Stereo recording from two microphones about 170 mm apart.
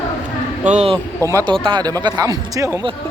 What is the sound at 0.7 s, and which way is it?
Speech, 40° right (ahead or behind).